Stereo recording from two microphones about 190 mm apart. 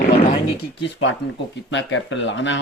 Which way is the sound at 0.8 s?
75° left (ahead or behind).